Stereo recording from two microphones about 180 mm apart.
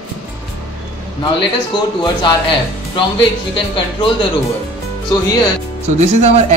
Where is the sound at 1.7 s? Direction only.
25° left (ahead or behind).